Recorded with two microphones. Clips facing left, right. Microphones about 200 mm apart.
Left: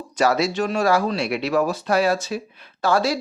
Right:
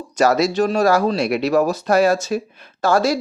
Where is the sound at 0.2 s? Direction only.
40° right (ahead or behind).